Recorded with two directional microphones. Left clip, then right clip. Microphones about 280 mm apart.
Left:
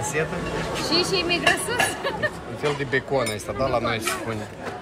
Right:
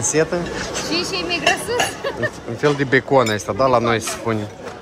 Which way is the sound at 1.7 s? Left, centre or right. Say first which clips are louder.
Right 3 dB; centre.